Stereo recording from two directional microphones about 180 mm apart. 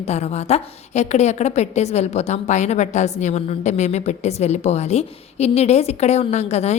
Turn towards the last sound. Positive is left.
turn(degrees=35)  # may be behind; listen again after turning